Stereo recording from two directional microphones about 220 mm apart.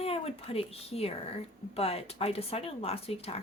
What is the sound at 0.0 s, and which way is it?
A woman's voice, 25° left (ahead or behind).